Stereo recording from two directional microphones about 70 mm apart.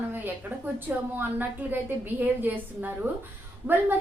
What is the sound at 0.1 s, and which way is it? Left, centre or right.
A woman's voice, right.